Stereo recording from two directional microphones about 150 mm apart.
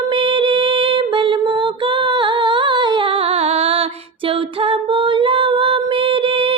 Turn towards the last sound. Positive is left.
turn(degrees=-35)  # may be behind; listen again after turning